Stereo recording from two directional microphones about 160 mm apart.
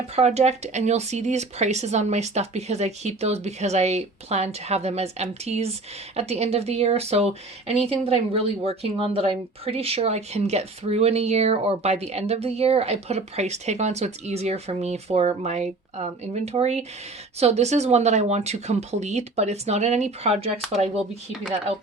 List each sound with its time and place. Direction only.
0.2 s speech: 45° right (ahead or behind)